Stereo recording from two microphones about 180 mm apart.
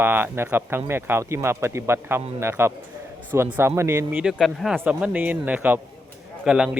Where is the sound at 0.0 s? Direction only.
10° right (ahead or behind).